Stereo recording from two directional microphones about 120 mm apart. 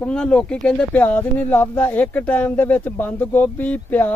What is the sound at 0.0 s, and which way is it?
Speech, 10° left (ahead or behind).